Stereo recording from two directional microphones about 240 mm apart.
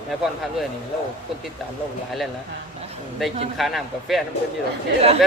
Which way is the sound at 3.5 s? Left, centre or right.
Centre.